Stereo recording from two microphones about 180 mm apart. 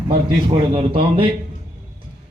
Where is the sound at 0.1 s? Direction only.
30° right (ahead or behind).